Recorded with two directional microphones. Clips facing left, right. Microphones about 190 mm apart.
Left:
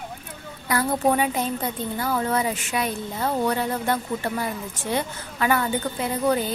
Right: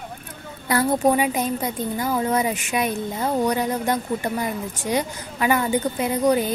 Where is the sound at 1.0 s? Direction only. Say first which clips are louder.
Right 2 dB; 10° right (ahead or behind).